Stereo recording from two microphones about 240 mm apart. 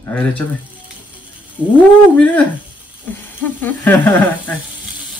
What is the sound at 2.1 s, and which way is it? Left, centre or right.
Sizzle, centre.